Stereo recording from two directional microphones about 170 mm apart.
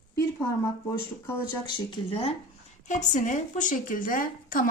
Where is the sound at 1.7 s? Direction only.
30° left (ahead or behind).